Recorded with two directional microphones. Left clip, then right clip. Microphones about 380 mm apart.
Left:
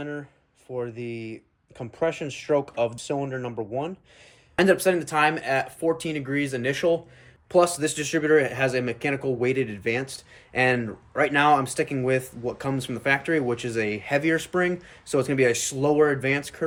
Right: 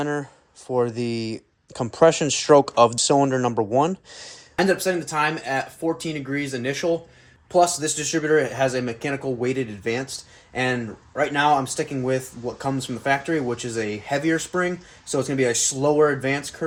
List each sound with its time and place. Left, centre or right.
0.0 s speech: centre
4.5 s speech: centre